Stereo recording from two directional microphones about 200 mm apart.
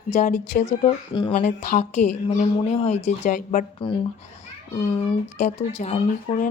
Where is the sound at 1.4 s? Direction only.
40° left (ahead or behind).